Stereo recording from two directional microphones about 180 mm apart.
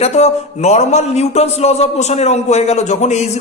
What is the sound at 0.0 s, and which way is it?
A man's voice, 40° left (ahead or behind).